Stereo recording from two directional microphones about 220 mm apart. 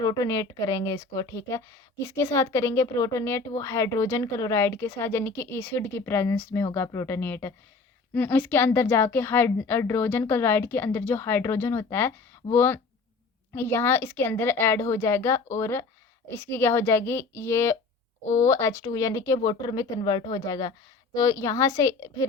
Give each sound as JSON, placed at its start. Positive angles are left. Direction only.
{"t": 0.0, "sound": "speech", "side_deg": 15}